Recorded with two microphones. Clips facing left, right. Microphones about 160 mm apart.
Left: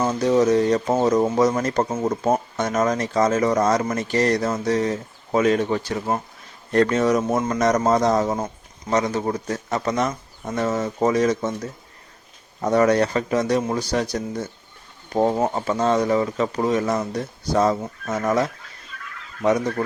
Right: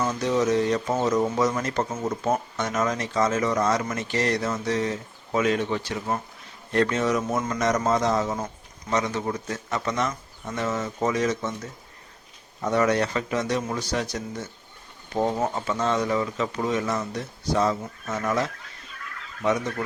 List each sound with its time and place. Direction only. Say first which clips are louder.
0.0 s speech: left 5 dB; 35° left (ahead or behind)